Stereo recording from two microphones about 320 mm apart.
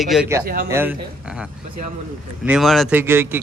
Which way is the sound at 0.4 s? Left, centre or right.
Right.